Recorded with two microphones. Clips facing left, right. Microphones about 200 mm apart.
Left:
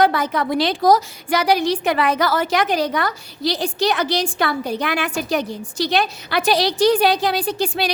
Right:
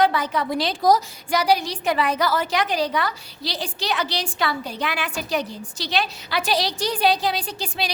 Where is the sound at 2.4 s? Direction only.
45° left (ahead or behind).